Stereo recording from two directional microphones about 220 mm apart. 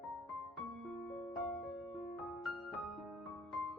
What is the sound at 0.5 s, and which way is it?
Music, centre (ahead or behind).